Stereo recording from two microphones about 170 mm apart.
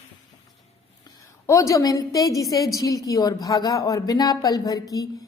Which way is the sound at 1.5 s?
20° left (ahead or behind).